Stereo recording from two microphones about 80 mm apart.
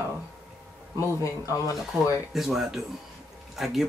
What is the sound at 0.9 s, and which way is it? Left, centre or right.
Speech, left.